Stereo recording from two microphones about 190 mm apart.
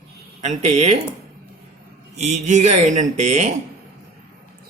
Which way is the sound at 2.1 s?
35° right (ahead or behind).